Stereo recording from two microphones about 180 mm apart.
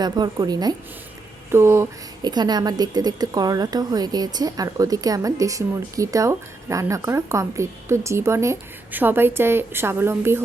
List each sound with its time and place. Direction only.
0.0 s a woman's voice: 20° right (ahead or behind)